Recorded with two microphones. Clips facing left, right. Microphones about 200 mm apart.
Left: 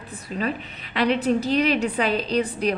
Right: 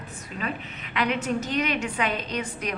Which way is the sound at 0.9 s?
35° left (ahead or behind).